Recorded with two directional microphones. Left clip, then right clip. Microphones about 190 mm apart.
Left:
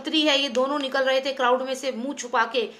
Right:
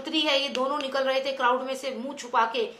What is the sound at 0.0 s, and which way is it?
A woman's voice, 45° left (ahead or behind).